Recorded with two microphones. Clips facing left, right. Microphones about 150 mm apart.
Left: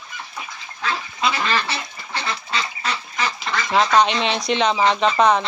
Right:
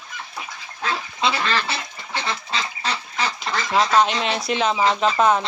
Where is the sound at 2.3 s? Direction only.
30° right (ahead or behind).